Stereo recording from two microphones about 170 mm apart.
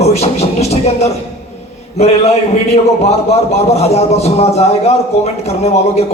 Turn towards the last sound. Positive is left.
turn(degrees=40)  # may be behind; listen again after turning